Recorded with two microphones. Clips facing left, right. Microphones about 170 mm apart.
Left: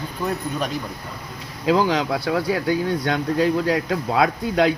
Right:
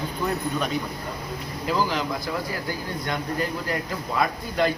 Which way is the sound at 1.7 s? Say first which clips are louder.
Left 6 dB; 85° left.